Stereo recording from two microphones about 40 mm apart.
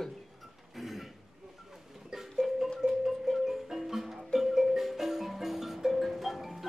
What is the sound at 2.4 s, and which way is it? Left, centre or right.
Music, centre.